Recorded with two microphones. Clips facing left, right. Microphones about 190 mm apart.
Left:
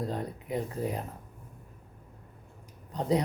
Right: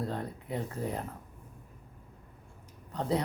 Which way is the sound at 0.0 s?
15° left (ahead or behind).